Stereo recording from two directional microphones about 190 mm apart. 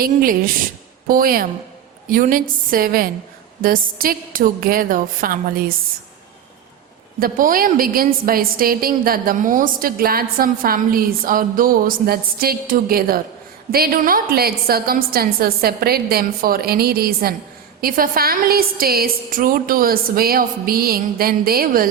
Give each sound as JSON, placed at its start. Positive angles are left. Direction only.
{"t": 0.0, "sound": "a woman's voice", "side_deg": -50}
{"t": 7.2, "sound": "a woman's voice", "side_deg": -45}